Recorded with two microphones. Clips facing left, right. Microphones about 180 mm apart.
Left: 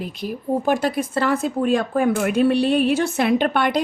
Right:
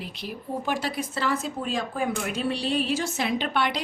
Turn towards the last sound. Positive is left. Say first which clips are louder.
# left 8 dB
turn(degrees=50)  # may be behind; listen again after turning